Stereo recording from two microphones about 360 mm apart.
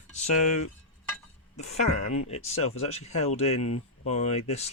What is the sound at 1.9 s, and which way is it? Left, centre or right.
Speech, left.